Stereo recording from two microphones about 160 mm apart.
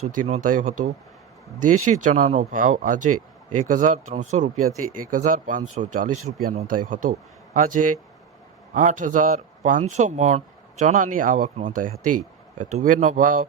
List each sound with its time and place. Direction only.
0.3 s speech: 50° right (ahead or behind)